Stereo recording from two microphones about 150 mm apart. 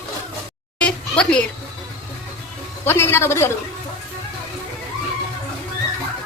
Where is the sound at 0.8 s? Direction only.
10° left (ahead or behind).